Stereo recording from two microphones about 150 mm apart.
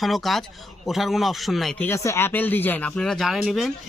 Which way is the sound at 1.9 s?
20° left (ahead or behind).